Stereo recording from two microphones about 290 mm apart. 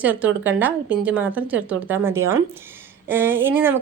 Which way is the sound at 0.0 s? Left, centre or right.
Centre.